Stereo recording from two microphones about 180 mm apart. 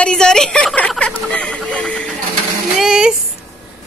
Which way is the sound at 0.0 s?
5° left (ahead or behind).